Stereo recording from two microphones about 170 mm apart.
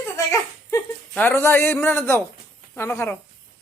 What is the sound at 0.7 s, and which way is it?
Speech, 10° left (ahead or behind).